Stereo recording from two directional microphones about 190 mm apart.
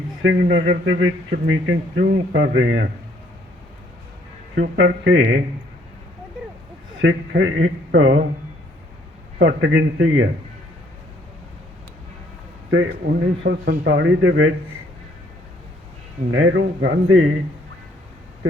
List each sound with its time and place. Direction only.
0.2 s speech: 65° right (ahead or behind)
4.6 s speech: 70° right (ahead or behind)
7.0 s speech: 90° right; by 8.2 s 70° right (ahead or behind)
9.4 s speech: 70° right (ahead or behind)
13.1 s a man's voice: 65° right (ahead or behind); by 14.5 s 90° right
16.3 s speech: 80° right